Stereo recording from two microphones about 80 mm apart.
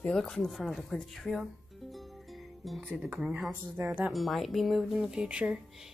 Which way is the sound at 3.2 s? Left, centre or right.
Centre.